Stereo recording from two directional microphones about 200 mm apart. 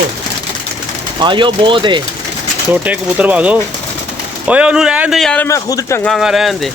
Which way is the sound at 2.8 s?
5° right (ahead or behind).